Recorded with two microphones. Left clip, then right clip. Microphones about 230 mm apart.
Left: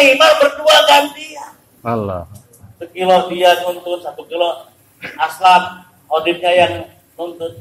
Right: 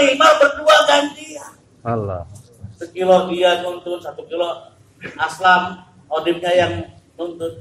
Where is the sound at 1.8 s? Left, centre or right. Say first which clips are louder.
Left 3 dB; left.